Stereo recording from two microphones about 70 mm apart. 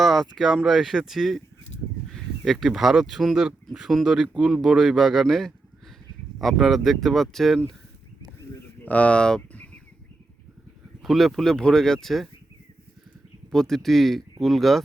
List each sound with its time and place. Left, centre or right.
0.0 s speech: centre
8.8 s bird: left
11.0 s speech: centre
13.5 s speech: centre